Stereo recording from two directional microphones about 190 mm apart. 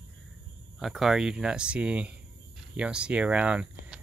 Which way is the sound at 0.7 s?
Centre (ahead or behind).